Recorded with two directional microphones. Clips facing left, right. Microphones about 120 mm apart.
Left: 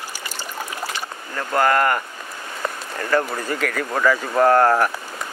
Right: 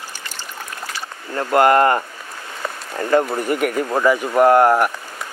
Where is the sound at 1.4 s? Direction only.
25° right (ahead or behind).